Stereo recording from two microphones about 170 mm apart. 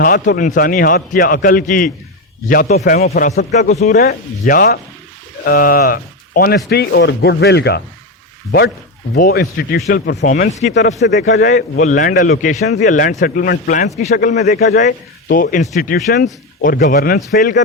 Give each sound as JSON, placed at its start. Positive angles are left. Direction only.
{"t": 0.0, "sound": "a man's voice", "side_deg": 55}
{"t": 3.7, "sound": "speech", "side_deg": 40}
{"t": 3.9, "sound": "a man's voice", "side_deg": 60}
{"t": 6.7, "sound": "speech", "side_deg": 75}
{"t": 9.1, "sound": "speech", "side_deg": 65}
{"t": 10.2, "sound": "a man's voice", "side_deg": 60}
{"t": 10.6, "sound": "a man's voice", "side_deg": 45}
{"t": 11.0, "sound": "a man's voice", "side_deg": 85}
{"t": 11.4, "sound": "a man's voice", "side_deg": 45}
{"t": 13.8, "sound": "a man's voice", "side_deg": 40}
{"t": 14.4, "sound": "a man's voice", "side_deg": 55}